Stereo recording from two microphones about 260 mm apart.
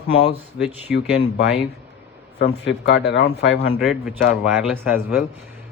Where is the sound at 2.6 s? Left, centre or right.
Left.